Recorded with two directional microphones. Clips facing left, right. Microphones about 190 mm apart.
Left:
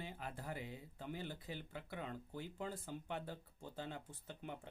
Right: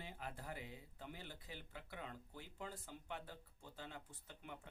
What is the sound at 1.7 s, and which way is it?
Speech, 40° left (ahead or behind).